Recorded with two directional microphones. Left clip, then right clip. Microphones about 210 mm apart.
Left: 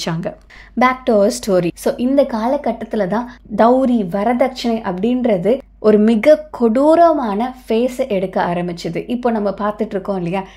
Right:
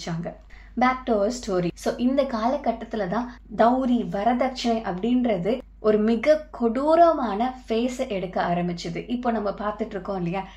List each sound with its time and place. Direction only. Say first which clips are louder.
0.0 s a woman's voice: left 10 dB; 50° left (ahead or behind)